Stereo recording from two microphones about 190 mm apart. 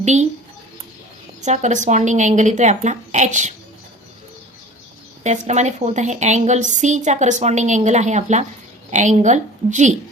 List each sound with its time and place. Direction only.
0.0 s speech: 35° right (ahead or behind)
1.4 s a woman's voice: 40° right (ahead or behind)
5.2 s a woman's voice: 40° right (ahead or behind)